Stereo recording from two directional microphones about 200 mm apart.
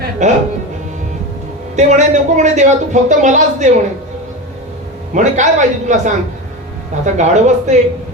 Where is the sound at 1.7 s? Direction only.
35° right (ahead or behind).